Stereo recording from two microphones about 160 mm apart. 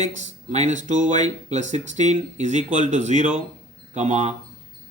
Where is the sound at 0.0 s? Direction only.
50° right (ahead or behind).